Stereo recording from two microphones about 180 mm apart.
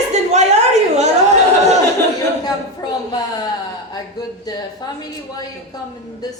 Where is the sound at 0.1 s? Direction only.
40° right (ahead or behind).